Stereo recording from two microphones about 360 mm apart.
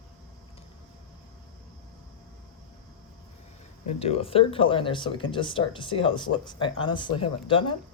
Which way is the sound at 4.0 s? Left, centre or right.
Centre.